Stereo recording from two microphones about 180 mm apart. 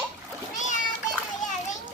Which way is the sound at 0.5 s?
45° left (ahead or behind).